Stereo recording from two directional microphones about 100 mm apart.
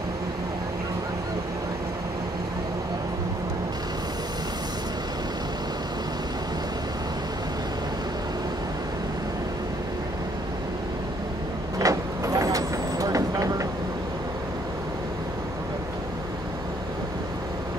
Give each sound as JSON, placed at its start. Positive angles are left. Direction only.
{"t": 11.8, "sound": "vehicle", "side_deg": -35}